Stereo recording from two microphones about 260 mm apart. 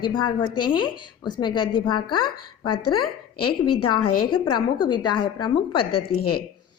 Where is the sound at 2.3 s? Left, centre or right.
Left.